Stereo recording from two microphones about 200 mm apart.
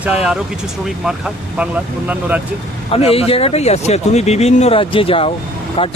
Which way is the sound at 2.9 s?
30° left (ahead or behind).